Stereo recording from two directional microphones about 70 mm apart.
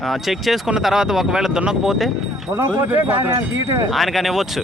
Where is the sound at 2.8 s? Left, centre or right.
Right.